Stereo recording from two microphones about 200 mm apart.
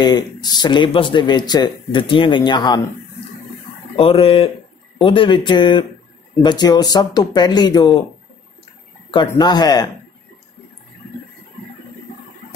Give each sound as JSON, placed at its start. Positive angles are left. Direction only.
{"t": 0.0, "sound": "speech", "side_deg": 20}
{"t": 3.9, "sound": "speech", "side_deg": 30}
{"t": 9.4, "sound": "speech", "side_deg": 20}